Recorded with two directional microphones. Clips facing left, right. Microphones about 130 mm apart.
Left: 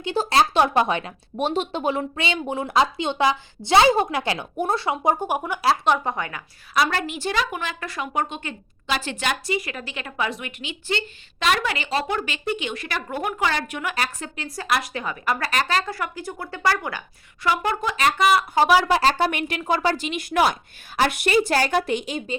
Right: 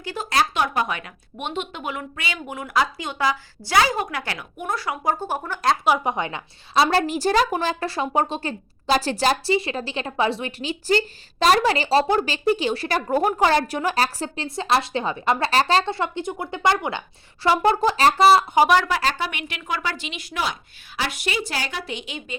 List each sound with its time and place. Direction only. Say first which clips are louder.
0.0 s speech: left 3 dB; 25° left (ahead or behind)
5.8 s a woman's voice: right 1 dB; 10° right (ahead or behind); by 18.4 s 35° right (ahead or behind)
18.9 s speech: left 4 dB; 25° left (ahead or behind)
19.1 s a woman's voice: left 6 dB; 40° left (ahead or behind)